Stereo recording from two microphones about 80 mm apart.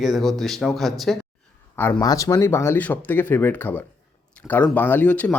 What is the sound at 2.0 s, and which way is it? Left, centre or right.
Speech, left.